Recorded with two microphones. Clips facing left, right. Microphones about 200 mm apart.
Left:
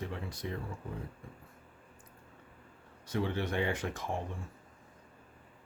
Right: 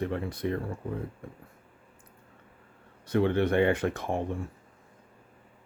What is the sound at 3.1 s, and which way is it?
Speech, 60° right (ahead or behind).